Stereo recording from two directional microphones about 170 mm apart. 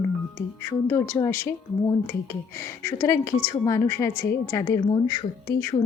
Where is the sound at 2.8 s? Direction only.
15° left (ahead or behind).